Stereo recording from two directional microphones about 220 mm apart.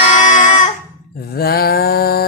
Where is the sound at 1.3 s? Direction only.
45° left (ahead or behind).